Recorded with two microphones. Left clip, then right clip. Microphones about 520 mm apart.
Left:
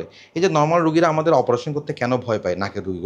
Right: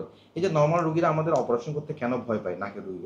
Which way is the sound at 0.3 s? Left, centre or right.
Left.